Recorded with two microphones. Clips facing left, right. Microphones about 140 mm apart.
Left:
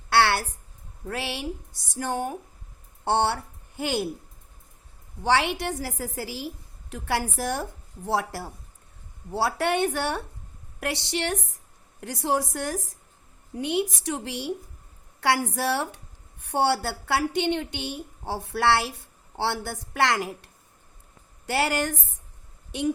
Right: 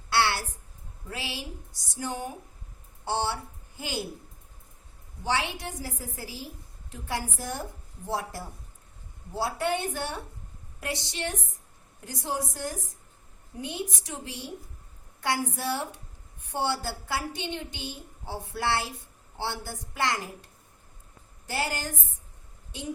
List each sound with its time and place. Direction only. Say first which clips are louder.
0.1 s a sound: left 4 dB; 60° left (ahead or behind)
1.0 s a woman's voice: left 6 dB; 60° left (ahead or behind)
5.2 s a woman's voice: left 6 dB; 70° left (ahead or behind)